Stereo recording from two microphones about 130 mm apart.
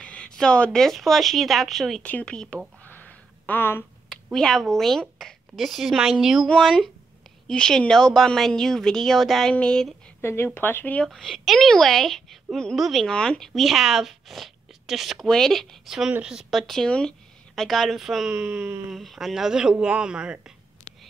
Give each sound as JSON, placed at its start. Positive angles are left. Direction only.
{"t": 0.0, "sound": "a sound", "side_deg": 10}
{"t": 0.4, "sound": "a woman's voice", "side_deg": 5}
{"t": 2.0, "sound": "a sound", "side_deg": 10}
{"t": 4.3, "sound": "a woman's voice", "side_deg": 5}
{"t": 10.2, "sound": "speech", "side_deg": 20}
{"t": 11.1, "sound": "a woman's voice", "side_deg": 0}